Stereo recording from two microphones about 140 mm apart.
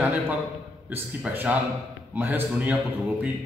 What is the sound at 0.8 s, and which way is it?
A man's voice, 15° right (ahead or behind).